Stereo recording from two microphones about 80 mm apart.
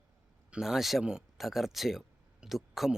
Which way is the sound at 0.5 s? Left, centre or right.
Centre.